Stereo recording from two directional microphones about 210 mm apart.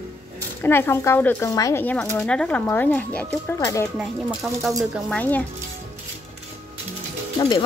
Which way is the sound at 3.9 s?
Centre (ahead or behind).